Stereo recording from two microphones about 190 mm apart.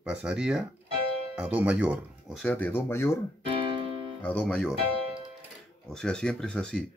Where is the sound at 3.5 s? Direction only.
25° right (ahead or behind).